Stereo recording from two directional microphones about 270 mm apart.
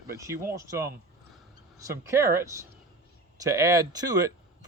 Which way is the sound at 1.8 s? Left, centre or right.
Centre.